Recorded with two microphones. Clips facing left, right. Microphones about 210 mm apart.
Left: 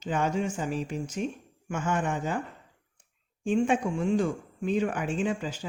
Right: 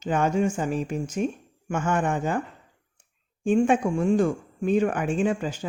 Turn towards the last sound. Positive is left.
turn(degrees=-50)  # may be behind; listen again after turning